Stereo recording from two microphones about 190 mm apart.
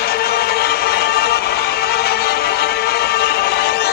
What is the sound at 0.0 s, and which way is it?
Music, 55° left (ahead or behind).